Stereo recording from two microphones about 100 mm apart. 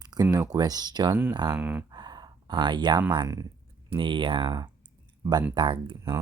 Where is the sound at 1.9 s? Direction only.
45° right (ahead or behind).